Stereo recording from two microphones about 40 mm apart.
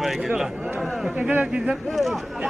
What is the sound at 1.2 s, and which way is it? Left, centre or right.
Speech, right.